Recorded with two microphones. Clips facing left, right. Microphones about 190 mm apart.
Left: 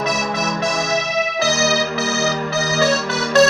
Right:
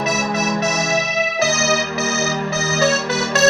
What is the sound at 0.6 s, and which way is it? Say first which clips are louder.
Electric piano: even; 20° right (ahead or behind).